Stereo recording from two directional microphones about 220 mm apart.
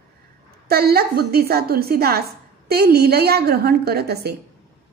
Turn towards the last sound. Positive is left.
turn(degrees=-45)  # may be behind; listen again after turning